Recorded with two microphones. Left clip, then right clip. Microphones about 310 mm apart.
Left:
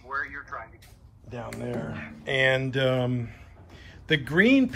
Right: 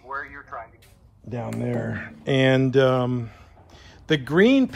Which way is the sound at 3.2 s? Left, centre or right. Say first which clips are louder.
Right 3 dB; right.